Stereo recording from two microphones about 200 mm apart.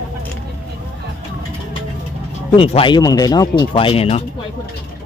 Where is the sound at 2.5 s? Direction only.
25° left (ahead or behind).